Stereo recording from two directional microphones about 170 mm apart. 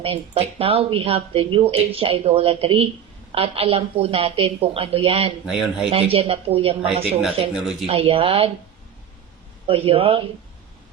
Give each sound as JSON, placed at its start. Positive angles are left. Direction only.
{"t": 0.0, "sound": "speech", "side_deg": -35}
{"t": 5.5, "sound": "speech", "side_deg": -5}
{"t": 5.9, "sound": "speech", "side_deg": -35}
{"t": 6.8, "sound": "speech", "side_deg": -5}
{"t": 7.9, "sound": "speech", "side_deg": -35}
{"t": 9.6, "sound": "speech", "side_deg": -35}